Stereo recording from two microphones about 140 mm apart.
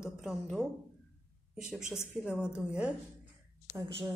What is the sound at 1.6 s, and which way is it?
Speech, 5° right (ahead or behind).